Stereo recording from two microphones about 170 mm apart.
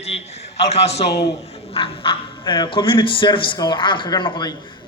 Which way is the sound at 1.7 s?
30° left (ahead or behind).